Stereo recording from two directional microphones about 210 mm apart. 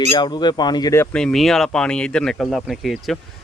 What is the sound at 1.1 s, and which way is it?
Speech, centre (ahead or behind).